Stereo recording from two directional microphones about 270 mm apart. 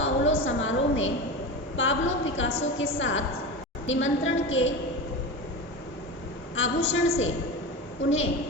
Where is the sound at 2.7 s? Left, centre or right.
Left.